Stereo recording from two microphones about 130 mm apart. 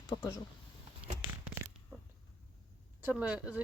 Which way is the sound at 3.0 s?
10° right (ahead or behind).